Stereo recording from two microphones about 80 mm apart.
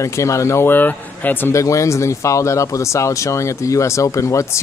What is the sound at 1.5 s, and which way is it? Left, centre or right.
Speech, left.